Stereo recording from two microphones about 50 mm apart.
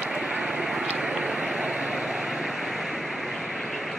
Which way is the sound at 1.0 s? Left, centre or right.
Right.